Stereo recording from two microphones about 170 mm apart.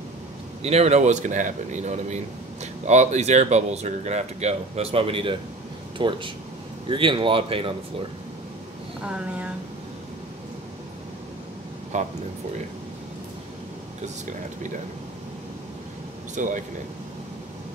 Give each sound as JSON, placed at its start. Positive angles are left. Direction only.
{"t": 0.6, "sound": "a man's voice", "side_deg": -40}
{"t": 9.0, "sound": "speech", "side_deg": -5}
{"t": 11.9, "sound": "speech", "side_deg": -45}
{"t": 16.4, "sound": "speech", "side_deg": -50}